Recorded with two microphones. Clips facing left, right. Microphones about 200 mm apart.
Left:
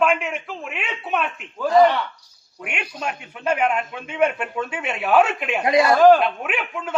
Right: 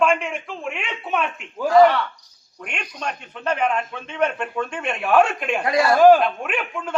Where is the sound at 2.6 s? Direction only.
10° left (ahead or behind).